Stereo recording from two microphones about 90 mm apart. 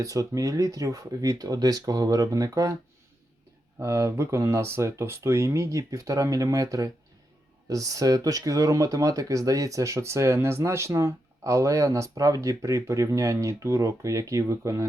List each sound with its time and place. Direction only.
0.0 s speech: 40° right (ahead or behind)
3.8 s speech: 30° right (ahead or behind)